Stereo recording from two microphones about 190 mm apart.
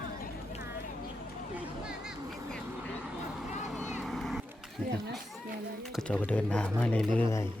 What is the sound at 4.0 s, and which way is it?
Vehicle, centre (ahead or behind).